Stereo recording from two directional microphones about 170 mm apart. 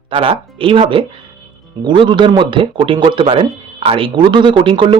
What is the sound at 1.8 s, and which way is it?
Speech, 30° right (ahead or behind).